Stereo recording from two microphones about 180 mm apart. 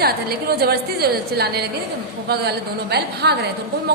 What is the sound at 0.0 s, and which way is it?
A woman's voice, 60° right (ahead or behind).